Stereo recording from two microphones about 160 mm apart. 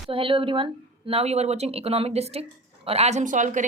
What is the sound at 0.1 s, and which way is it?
A woman's voice, 35° right (ahead or behind).